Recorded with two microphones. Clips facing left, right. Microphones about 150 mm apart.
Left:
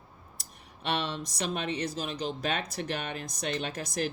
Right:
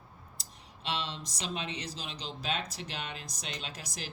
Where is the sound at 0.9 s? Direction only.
60° left (ahead or behind).